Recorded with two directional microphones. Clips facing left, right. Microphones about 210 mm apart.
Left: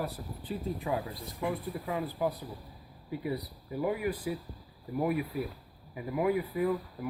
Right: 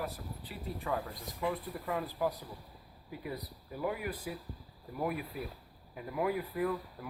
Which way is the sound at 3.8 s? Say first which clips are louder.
Left 5 dB; 10° left (ahead or behind).